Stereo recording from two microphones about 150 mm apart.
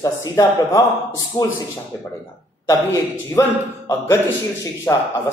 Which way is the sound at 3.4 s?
20° left (ahead or behind).